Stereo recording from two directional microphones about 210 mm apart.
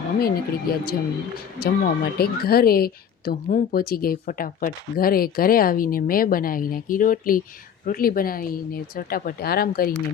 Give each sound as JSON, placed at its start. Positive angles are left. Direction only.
{"t": 0.2, "sound": "a woman's voice", "side_deg": 45}